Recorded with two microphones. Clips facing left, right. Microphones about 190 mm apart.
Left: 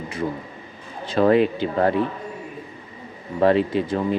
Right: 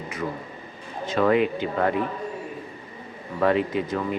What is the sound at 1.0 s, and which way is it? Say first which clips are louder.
Speech: left 3 dB; 30° left (ahead or behind).